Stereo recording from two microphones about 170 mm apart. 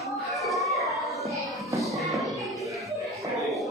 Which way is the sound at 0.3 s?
Centre (ahead or behind).